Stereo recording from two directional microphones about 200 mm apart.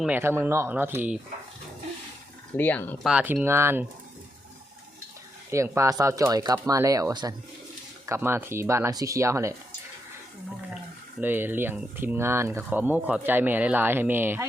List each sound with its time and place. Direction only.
0.0 s speech: 10° right (ahead or behind)
2.6 s speech: 10° left (ahead or behind)
3.1 s speech: 5° right (ahead or behind)
5.5 s speech: 15° right (ahead or behind)
11.2 s speech: 10° right (ahead or behind)